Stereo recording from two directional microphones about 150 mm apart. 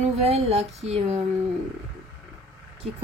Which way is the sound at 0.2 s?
45° right (ahead or behind).